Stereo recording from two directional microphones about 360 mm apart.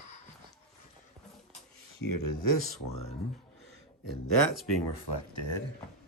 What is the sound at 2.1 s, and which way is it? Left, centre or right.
Speech, left.